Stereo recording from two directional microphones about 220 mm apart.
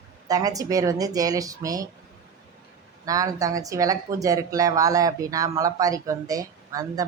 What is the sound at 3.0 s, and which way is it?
Speech, 15° right (ahead or behind).